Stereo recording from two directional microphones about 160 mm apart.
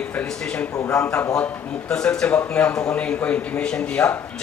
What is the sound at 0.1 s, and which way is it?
A man's voice, 10° left (ahead or behind).